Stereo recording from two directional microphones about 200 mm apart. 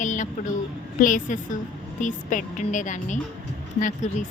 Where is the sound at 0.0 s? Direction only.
40° left (ahead or behind).